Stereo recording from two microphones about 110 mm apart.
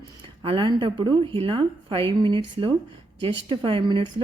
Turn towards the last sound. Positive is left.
turn(degrees=-50)  # may be behind; listen again after turning